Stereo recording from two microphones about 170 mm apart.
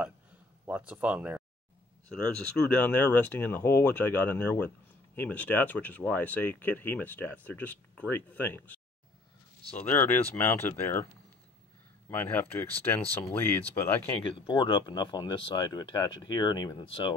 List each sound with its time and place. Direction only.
0.7 s speech: 10° right (ahead or behind)
2.0 s speech: 5° left (ahead or behind)
9.8 s speech: 15° left (ahead or behind)
12.1 s speech: 10° left (ahead or behind)
14.4 s speech: 25° left (ahead or behind)